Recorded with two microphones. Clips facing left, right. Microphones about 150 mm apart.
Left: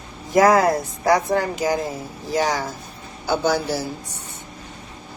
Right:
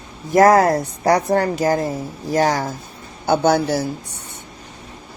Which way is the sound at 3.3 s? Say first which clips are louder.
Right 5 dB; 60° right (ahead or behind).